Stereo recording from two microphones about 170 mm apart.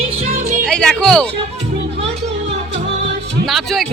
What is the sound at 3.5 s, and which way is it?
Music, centre (ahead or behind).